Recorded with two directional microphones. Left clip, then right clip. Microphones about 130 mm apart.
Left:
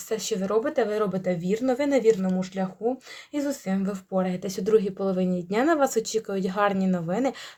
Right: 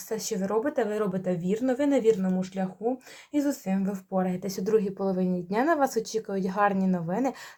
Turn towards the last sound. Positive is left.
turn(degrees=25)  # may be behind; listen again after turning